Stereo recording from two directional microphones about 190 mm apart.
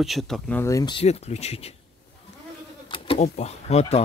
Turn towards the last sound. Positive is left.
turn(degrees=35)  # may be behind; listen again after turning